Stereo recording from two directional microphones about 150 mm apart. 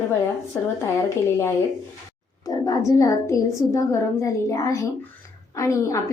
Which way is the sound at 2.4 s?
25° left (ahead or behind).